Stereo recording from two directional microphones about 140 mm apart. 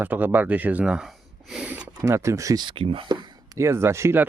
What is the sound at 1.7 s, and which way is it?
Speech, 15° right (ahead or behind).